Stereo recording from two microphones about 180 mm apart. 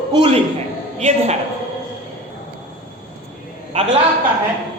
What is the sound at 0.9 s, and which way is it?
Speech, 35° right (ahead or behind).